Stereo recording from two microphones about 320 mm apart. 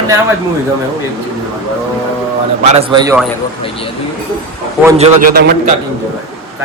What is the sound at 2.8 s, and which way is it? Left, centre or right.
Speech, centre.